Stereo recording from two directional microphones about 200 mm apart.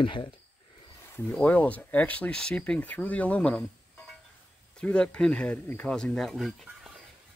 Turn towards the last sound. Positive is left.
turn(degrees=0)  # may be behind; listen again after turning